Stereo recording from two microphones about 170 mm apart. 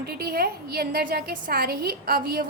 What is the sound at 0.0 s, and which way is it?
A woman's voice, 65° right (ahead or behind).